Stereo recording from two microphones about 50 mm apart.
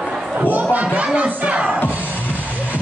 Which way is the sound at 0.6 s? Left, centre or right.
Right.